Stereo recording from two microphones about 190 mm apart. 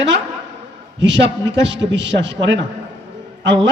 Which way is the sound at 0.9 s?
70° right (ahead or behind).